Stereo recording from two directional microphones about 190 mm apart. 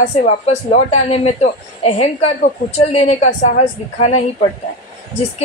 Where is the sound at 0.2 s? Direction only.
40° left (ahead or behind).